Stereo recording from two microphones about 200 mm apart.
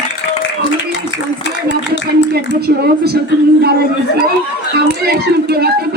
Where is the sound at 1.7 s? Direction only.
60° left (ahead or behind).